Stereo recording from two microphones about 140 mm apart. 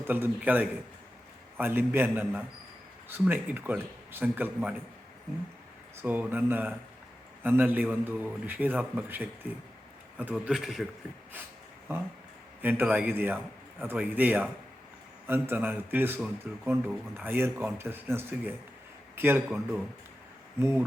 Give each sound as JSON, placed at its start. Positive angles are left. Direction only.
{"t": 0.0, "sound": "a man's voice", "side_deg": -15}
{"t": 6.0, "sound": "a man's voice", "side_deg": -10}
{"t": 12.6, "sound": "a man's voice", "side_deg": -15}